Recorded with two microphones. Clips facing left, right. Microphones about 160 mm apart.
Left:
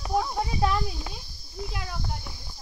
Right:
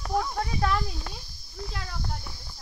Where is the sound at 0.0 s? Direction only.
20° left (ahead or behind); by 2.3 s centre (ahead or behind).